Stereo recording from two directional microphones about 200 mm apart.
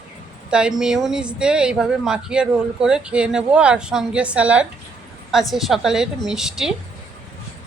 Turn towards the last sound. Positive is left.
turn(degrees=0)  # may be behind; listen again after turning